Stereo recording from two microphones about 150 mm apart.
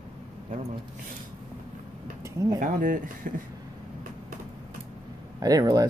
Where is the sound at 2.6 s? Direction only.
65° right (ahead or behind).